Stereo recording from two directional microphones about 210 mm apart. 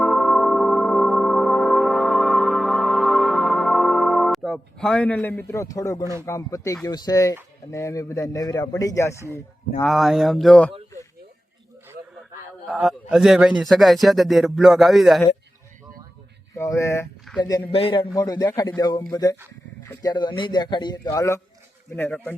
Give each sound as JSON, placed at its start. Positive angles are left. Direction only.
{"t": 0.0, "sound": "music", "side_deg": 0}
{"t": 6.2, "sound": "a man's voice", "side_deg": 15}
{"t": 9.8, "sound": "a man's voice", "side_deg": 0}
{"t": 12.6, "sound": "a man's voice", "side_deg": 0}
{"t": 16.6, "sound": "a man's voice", "side_deg": 15}
{"t": 17.3, "sound": "a sound", "side_deg": 5}
{"t": 17.7, "sound": "a man's voice", "side_deg": 25}